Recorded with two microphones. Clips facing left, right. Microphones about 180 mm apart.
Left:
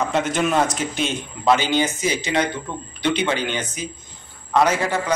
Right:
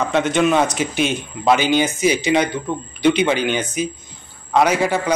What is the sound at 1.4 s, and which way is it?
A man's voice, 15° right (ahead or behind).